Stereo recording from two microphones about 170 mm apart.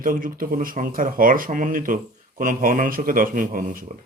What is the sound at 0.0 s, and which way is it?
Speech, 55° right (ahead or behind).